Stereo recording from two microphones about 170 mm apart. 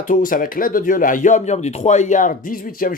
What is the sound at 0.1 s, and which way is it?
Speech, 55° left (ahead or behind).